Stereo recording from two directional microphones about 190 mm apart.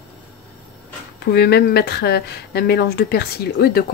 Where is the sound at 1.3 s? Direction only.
55° left (ahead or behind).